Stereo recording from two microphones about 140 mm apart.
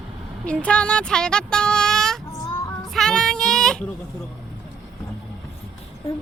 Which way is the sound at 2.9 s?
5° left (ahead or behind).